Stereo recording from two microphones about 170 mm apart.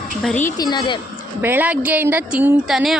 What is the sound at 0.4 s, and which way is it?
Speech, 25° left (ahead or behind).